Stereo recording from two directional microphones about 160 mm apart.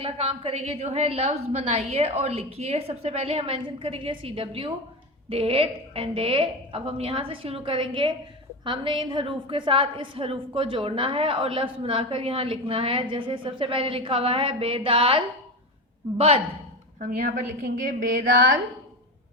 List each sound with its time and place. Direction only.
0.0 s a woman's voice: 35° right (ahead or behind)
17.0 s a woman's voice: 50° right (ahead or behind)